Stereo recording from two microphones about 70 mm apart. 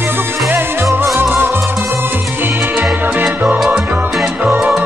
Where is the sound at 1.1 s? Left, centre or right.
Right.